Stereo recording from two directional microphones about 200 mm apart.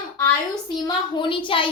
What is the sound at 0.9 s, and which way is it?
Speech, 25° left (ahead or behind).